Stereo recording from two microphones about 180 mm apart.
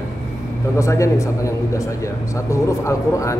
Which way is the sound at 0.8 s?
15° left (ahead or behind).